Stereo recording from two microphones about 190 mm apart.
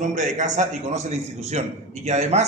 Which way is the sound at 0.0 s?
40° right (ahead or behind).